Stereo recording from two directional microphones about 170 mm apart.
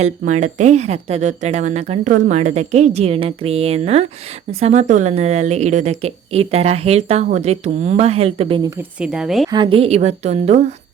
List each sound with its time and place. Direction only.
0.0 s speech: 45° right (ahead or behind)
9.0 s speech: 5° right (ahead or behind)
9.5 s speech: 30° right (ahead or behind)